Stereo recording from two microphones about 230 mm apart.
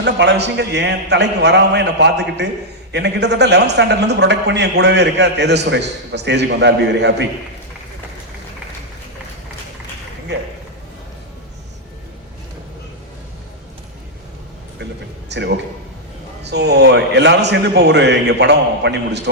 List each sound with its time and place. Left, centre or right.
0.0 s a man's voice: right
10.3 s a sound: right
15.3 s a man's voice: right